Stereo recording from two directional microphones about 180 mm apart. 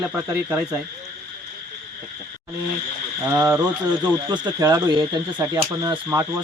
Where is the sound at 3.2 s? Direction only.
15° right (ahead or behind).